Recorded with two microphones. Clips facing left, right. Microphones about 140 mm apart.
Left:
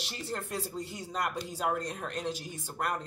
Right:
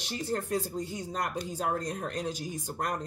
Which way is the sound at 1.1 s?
40° right (ahead or behind).